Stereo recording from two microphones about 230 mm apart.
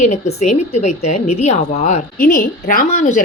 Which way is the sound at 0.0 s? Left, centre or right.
Left.